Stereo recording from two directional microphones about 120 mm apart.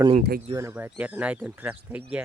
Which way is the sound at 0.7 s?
15° right (ahead or behind).